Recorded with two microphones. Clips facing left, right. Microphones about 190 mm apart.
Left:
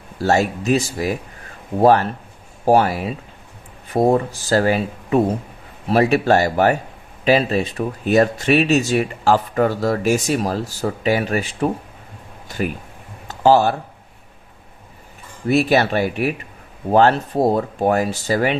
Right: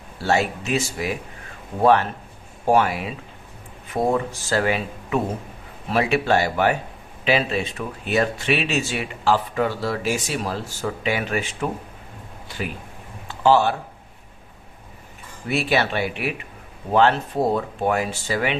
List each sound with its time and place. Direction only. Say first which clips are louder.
0.2 s speech: left 4 dB; 40° left (ahead or behind)
13.2 s a sound: left 3 dB; 40° left (ahead or behind)
15.4 s speech: left 6 dB; 40° left (ahead or behind)